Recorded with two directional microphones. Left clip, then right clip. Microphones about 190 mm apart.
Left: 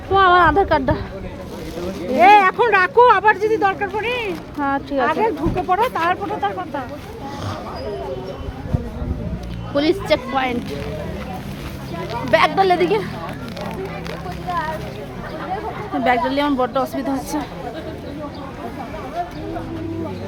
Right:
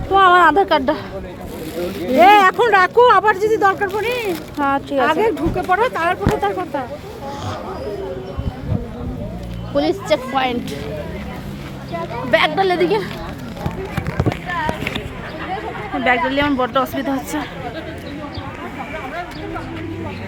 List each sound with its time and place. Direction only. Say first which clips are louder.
0.1 s a sound: right 2 dB; centre (ahead or behind)
2.1 s speech: right 1 dB; 5° right (ahead or behind); by 4.3 s 25° right (ahead or behind)
4.6 s speech: right 3 dB; centre (ahead or behind)
4.9 s speech: right 2 dB; 40° right (ahead or behind)
9.7 s speech: even; 10° left (ahead or behind)
10.3 s speech: right 2 dB; 5° right (ahead or behind)
12.3 s speech: left 1 dB; 5° left (ahead or behind)
16.0 s speech: right 1 dB; 15° left (ahead or behind); by 17.4 s centre (ahead or behind)